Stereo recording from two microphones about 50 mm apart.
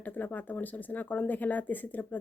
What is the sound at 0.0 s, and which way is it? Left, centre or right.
Speech, left.